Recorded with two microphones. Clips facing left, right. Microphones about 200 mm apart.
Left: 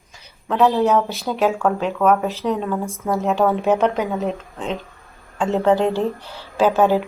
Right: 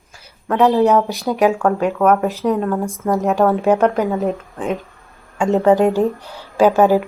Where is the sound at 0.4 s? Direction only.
Centre (ahead or behind).